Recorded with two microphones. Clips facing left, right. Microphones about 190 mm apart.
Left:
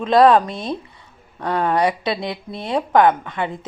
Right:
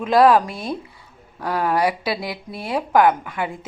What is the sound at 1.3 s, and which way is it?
Speech, 5° right (ahead or behind).